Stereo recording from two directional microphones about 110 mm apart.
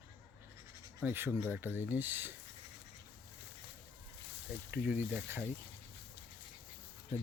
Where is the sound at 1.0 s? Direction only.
20° right (ahead or behind).